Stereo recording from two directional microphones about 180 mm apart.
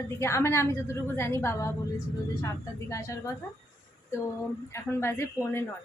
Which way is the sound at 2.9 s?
15° left (ahead or behind).